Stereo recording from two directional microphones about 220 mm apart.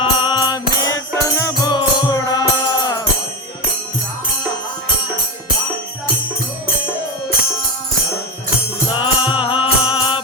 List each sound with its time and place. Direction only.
0.0 s music: 20° left (ahead or behind)
8.9 s music: 25° left (ahead or behind)